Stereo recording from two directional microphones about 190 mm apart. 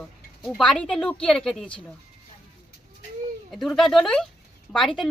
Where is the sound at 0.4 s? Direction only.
5° left (ahead or behind).